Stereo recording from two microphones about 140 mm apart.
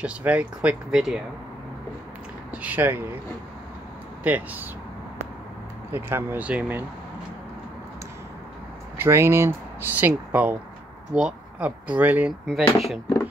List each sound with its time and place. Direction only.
0.0 s speech: 10° right (ahead or behind)
2.5 s speech: 10° right (ahead or behind)
4.2 s speech: 10° right (ahead or behind)
5.9 s speech: 15° right (ahead or behind)
8.9 s speech: 20° right (ahead or behind)
12.7 s speech: centre (ahead or behind)